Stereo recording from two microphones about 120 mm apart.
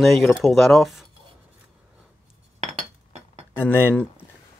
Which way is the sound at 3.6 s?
20° left (ahead or behind).